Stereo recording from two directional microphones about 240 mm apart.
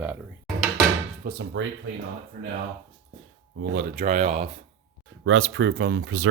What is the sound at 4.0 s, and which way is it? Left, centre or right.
Speech, right.